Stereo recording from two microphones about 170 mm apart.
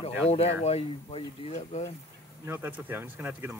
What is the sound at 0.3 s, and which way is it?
Speech, 35° left (ahead or behind).